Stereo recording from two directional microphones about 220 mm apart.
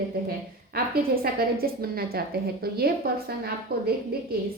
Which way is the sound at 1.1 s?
40° right (ahead or behind).